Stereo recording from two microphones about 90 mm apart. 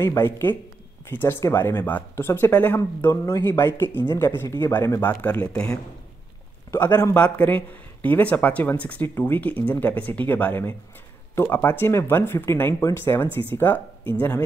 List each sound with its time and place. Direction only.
0.0 s speech: 30° left (ahead or behind); by 5.8 s 10° left (ahead or behind)
6.7 s a man's voice: 25° left (ahead or behind)